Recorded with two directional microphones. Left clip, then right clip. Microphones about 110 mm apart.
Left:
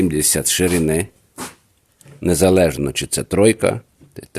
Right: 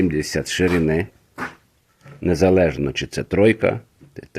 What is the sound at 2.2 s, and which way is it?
Speech, 35° left (ahead or behind).